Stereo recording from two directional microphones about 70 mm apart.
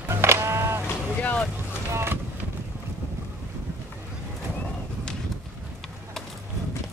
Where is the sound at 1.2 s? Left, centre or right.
Left.